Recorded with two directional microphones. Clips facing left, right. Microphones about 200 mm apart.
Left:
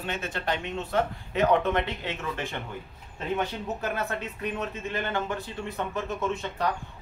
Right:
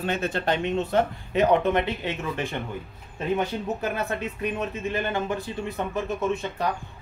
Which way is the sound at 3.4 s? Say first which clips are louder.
Right 3 dB; 15° right (ahead or behind).